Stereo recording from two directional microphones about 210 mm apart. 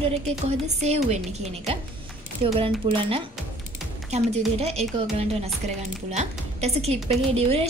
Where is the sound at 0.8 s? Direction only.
30° right (ahead or behind).